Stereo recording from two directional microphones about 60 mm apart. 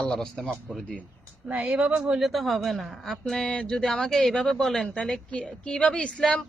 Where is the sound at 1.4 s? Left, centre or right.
Right.